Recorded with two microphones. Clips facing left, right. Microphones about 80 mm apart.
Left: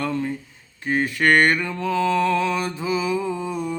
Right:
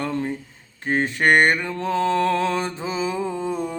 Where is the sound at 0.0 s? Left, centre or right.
Right.